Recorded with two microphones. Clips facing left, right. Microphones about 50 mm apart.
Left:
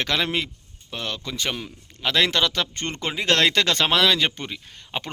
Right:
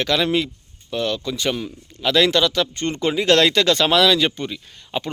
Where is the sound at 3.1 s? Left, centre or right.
Left.